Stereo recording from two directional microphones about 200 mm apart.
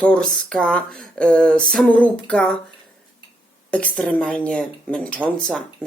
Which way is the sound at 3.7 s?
5° left (ahead or behind).